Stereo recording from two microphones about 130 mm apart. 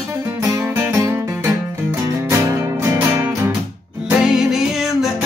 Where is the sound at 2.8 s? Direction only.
20° right (ahead or behind).